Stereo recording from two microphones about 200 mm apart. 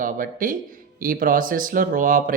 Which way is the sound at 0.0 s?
45° right (ahead or behind).